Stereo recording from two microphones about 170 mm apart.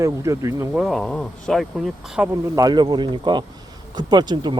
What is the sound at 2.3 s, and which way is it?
Speech, 20° right (ahead or behind).